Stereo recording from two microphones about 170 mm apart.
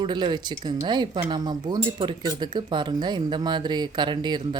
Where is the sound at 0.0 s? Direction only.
30° right (ahead or behind).